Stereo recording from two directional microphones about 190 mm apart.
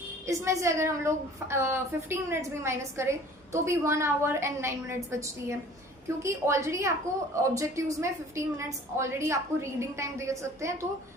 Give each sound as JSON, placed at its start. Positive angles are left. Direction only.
{"t": 0.3, "sound": "a woman's voice", "side_deg": -15}